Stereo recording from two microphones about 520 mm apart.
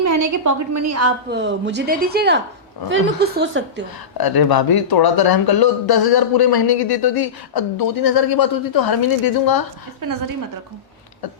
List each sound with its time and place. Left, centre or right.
0.0 s a woman's voice: right
4.2 s speech: left